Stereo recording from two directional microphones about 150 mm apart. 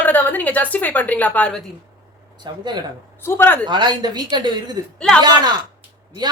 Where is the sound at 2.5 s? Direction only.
30° right (ahead or behind).